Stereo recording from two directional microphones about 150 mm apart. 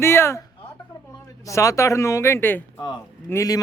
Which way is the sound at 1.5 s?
20° left (ahead or behind).